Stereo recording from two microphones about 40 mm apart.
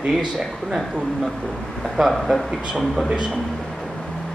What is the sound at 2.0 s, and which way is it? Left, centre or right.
Speech, centre.